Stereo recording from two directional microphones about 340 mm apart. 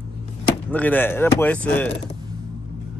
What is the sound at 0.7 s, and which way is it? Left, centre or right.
Speech, centre.